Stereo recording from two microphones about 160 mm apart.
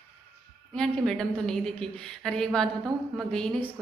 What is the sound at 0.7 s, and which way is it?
A woman's voice, 5° left (ahead or behind).